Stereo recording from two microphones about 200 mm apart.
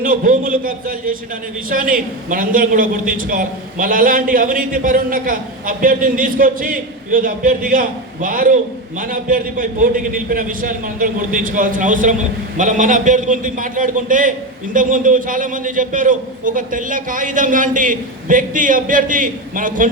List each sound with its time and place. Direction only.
0.0 s a man's voice: 40° right (ahead or behind)